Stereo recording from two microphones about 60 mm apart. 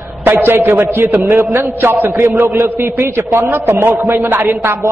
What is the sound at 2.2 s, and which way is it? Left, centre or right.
A man's voice, right.